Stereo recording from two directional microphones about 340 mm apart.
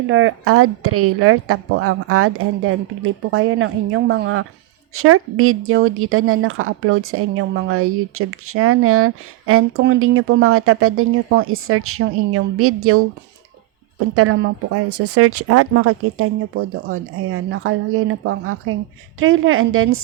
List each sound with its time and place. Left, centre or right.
0.1 s speech: right
4.9 s speech: right
14.2 s speech: right